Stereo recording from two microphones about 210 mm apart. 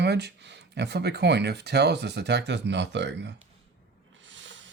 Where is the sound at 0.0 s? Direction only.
55° right (ahead or behind).